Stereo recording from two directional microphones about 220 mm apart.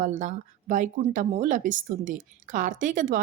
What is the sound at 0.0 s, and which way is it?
Speech, 35° right (ahead or behind).